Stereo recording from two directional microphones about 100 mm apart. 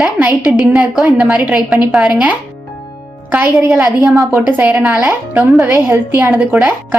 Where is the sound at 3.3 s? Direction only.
20° right (ahead or behind).